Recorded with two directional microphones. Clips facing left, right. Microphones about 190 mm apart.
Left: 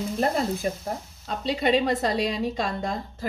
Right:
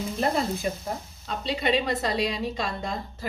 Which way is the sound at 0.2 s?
45° left (ahead or behind).